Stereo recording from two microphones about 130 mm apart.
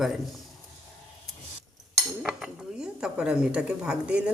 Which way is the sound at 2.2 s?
5° right (ahead or behind).